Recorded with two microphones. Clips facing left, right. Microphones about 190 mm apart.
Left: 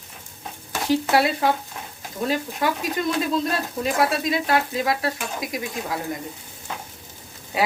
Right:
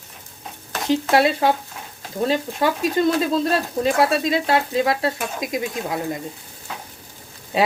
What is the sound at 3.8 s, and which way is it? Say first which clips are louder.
Speech: right 2 dB; 25° right (ahead or behind).